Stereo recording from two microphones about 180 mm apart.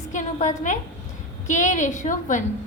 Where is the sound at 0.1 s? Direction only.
45° left (ahead or behind).